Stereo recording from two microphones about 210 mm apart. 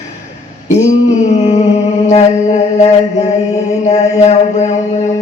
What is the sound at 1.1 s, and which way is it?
Music, 30° left (ahead or behind).